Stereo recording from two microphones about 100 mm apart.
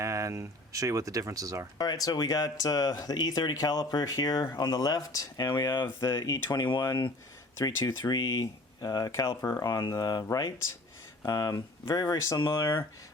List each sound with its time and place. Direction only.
0.0 s speech: 30° right (ahead or behind)
1.8 s speech: 40° left (ahead or behind)
9.6 s speech: 45° left (ahead or behind)